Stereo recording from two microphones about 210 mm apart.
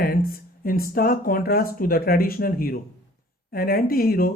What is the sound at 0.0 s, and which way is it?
Speech, 45° left (ahead or behind).